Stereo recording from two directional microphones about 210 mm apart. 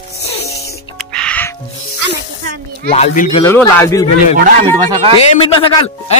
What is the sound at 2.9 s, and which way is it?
Speech, 35° left (ahead or behind).